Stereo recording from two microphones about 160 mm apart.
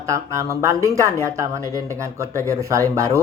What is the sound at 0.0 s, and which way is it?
Speech, 20° right (ahead or behind).